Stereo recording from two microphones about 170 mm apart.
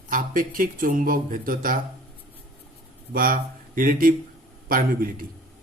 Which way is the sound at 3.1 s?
55° right (ahead or behind).